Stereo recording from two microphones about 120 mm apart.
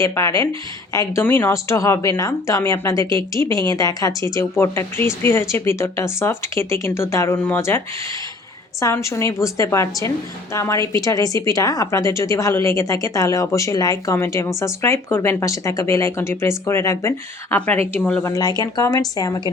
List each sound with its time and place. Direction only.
0.0 s a woman's voice: 25° left (ahead or behind)
8.8 s a woman's voice: 25° left (ahead or behind)